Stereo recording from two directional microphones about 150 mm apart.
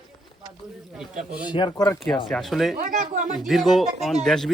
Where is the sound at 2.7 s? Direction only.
60° right (ahead or behind).